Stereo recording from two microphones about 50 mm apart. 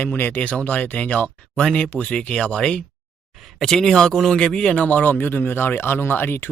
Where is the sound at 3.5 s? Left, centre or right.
Centre.